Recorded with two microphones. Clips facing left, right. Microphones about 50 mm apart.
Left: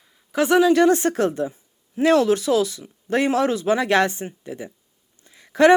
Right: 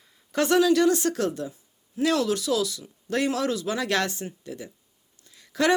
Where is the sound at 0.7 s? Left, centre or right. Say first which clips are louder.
Left 4 dB; left.